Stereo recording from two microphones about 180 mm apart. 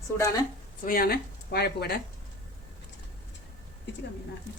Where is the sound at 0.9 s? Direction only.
55° left (ahead or behind).